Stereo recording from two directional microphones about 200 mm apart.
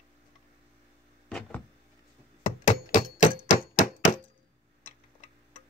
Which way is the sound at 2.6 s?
40° left (ahead or behind).